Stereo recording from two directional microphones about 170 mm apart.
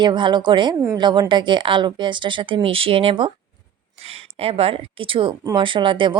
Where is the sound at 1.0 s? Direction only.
25° right (ahead or behind).